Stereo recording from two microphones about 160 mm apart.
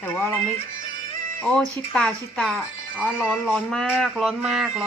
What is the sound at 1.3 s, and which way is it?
Speech, 10° left (ahead or behind).